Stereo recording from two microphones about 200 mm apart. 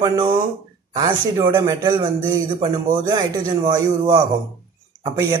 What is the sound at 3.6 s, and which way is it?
Speech, 25° right (ahead or behind).